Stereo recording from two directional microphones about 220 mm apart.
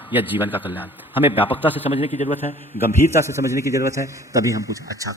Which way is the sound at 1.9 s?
30° left (ahead or behind).